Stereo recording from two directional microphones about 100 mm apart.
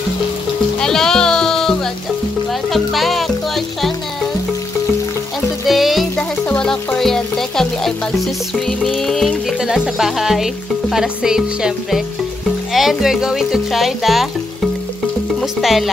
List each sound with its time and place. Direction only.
0.7 s music: 5° left (ahead or behind)
5.7 s music: centre (ahead or behind)
6.1 s music: 15° left (ahead or behind)
6.6 s music: 5° left (ahead or behind)
8.9 s speech: centre (ahead or behind)